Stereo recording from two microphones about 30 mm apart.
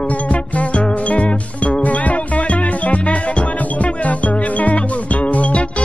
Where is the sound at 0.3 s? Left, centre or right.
Left.